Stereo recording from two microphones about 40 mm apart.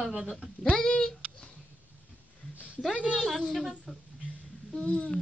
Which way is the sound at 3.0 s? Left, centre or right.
Right.